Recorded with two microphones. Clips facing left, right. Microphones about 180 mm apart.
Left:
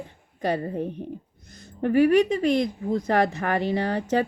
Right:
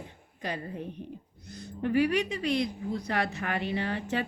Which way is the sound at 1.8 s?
45° left (ahead or behind).